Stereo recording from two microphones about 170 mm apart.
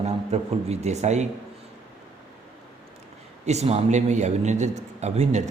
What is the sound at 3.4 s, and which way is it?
Speech, 40° right (ahead or behind).